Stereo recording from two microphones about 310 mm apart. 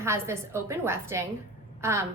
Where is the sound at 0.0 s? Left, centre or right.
Centre.